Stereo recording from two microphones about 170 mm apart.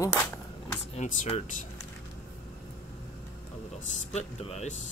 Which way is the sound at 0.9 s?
45° left (ahead or behind).